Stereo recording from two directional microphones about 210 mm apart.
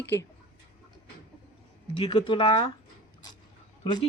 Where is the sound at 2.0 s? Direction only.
25° left (ahead or behind).